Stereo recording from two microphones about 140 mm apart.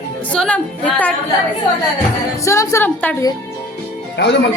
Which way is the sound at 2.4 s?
20° left (ahead or behind).